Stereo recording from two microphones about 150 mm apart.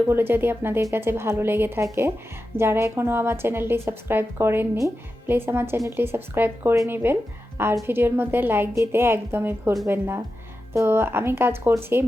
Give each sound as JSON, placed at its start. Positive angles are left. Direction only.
{"t": 0.1, "sound": "speech", "side_deg": -15}